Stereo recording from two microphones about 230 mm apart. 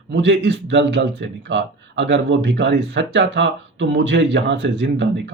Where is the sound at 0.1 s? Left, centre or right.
Right.